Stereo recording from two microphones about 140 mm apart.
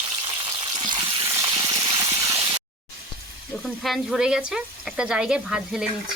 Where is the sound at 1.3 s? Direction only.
20° right (ahead or behind).